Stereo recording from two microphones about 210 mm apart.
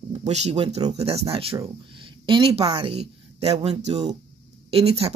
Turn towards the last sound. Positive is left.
turn(degrees=-30)  # may be behind; listen again after turning